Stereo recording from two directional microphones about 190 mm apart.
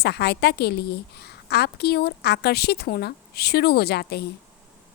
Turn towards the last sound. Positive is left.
turn(degrees=60)  # may be behind; listen again after turning